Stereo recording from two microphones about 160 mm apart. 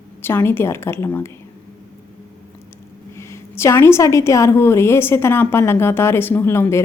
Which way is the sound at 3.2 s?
15° left (ahead or behind).